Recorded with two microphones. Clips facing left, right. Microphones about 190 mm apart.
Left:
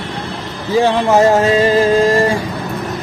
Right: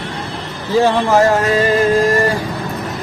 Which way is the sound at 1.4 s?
25° left (ahead or behind).